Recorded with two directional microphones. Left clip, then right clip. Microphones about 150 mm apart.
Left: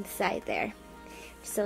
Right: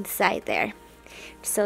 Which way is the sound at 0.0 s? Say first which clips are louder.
Right 7 dB; 35° right (ahead or behind).